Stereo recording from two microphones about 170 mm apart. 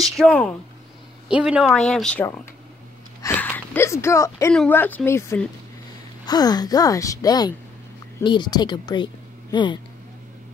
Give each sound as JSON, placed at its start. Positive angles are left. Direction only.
{"t": 0.1, "sound": "speech", "side_deg": 5}
{"t": 1.3, "sound": "speech", "side_deg": -5}
{"t": 3.2, "sound": "a sound", "side_deg": 10}
{"t": 4.6, "sound": "a woman's voice", "side_deg": 10}